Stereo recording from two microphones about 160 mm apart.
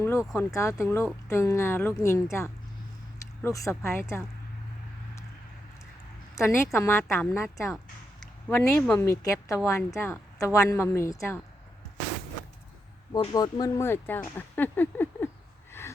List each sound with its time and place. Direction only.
0.3 s speech: 20° left (ahead or behind)
6.3 s a woman's voice: 15° left (ahead or behind)
13.1 s speech: 25° left (ahead or behind)
15.8 s a sound: 15° left (ahead or behind)